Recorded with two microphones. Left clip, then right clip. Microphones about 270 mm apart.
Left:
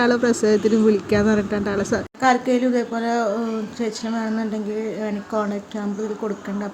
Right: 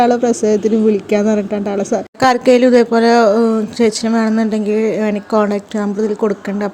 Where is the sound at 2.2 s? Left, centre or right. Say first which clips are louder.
Right 9 dB; right.